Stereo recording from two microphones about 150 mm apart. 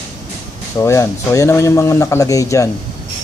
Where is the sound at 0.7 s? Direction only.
20° left (ahead or behind).